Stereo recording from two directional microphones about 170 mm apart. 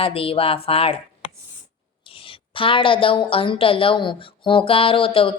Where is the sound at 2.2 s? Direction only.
30° left (ahead or behind).